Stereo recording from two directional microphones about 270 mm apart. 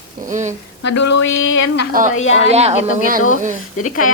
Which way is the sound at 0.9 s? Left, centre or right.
Left.